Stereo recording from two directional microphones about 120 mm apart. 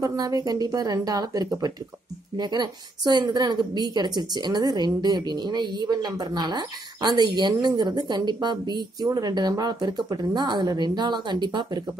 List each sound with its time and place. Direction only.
0.0 s a woman's voice: 30° right (ahead or behind)